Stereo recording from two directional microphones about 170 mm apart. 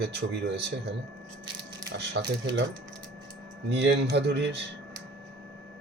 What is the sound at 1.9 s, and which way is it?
Speech, 90° right.